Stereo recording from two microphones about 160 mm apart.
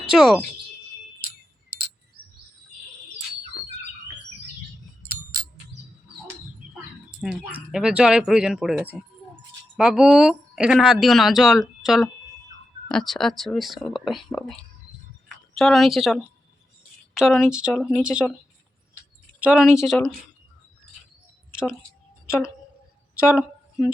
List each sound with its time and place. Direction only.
0.1 s speech: 5° right (ahead or behind)
7.5 s speech: 5° right (ahead or behind)
15.5 s speech: centre (ahead or behind)
19.4 s speech: 5° right (ahead or behind)
23.4 s a sound: 5° right (ahead or behind)